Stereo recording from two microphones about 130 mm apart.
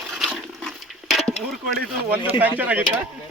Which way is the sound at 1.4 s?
5° left (ahead or behind).